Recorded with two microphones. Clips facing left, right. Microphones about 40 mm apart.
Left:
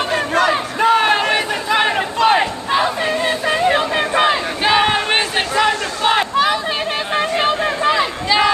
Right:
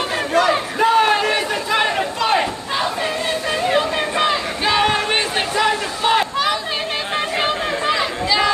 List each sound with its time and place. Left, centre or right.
0.1 s crowd: centre
1.9 s a sound: centre
7.2 s chatter: centre